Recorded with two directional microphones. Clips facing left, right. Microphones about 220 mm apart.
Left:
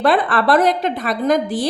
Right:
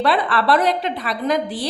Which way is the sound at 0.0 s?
45° left (ahead or behind).